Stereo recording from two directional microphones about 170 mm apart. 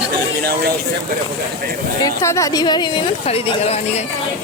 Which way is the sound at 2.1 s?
20° left (ahead or behind).